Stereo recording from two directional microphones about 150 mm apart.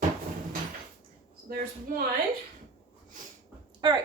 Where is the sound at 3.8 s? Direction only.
30° right (ahead or behind).